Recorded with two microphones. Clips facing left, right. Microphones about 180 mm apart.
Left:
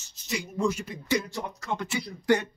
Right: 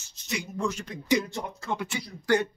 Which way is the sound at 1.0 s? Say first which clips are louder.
Right 3 dB; 20° right (ahead or behind).